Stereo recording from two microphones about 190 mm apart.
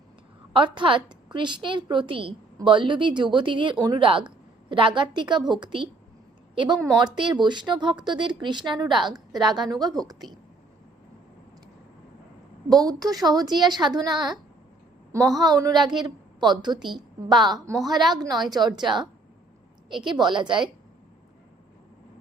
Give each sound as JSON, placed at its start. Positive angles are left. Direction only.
{"t": 0.5, "sound": "a woman's voice", "side_deg": -25}
{"t": 12.6, "sound": "a woman's voice", "side_deg": -20}